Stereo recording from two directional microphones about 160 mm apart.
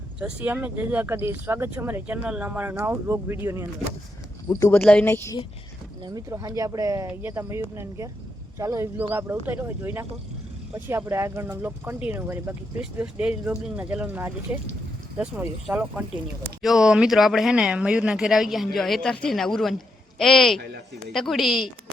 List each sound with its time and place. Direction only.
0.2 s speech: 5° right (ahead or behind)
4.4 s speech: 20° left (ahead or behind)
4.8 s speech: 10° left (ahead or behind)
6.0 s speech: 25° right (ahead or behind); by 21.7 s 5° right (ahead or behind)